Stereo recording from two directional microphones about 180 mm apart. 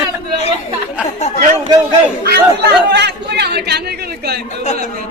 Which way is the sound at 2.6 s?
70° right (ahead or behind).